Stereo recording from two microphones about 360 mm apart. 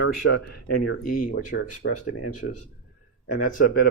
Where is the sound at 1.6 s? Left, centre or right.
Left.